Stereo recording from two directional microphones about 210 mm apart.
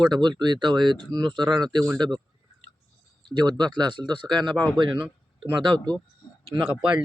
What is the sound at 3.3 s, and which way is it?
Speech, 20° right (ahead or behind).